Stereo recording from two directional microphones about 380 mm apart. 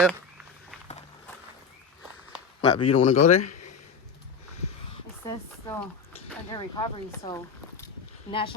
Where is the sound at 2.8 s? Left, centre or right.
Centre.